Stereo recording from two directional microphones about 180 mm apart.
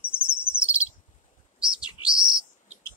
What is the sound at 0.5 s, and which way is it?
Bird, 5° right (ahead or behind).